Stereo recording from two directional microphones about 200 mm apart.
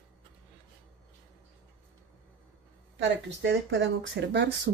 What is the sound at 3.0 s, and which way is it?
Speech, 65° right (ahead or behind).